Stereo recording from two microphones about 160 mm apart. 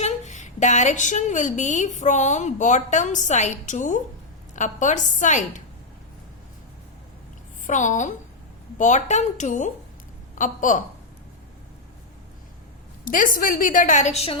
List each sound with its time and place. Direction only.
0.0 s a woman's voice: 50° left (ahead or behind)
7.7 s a woman's voice: 50° left (ahead or behind)
13.1 s a woman's voice: 55° left (ahead or behind)